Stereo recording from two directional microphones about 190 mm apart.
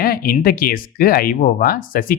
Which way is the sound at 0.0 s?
50° left (ahead or behind).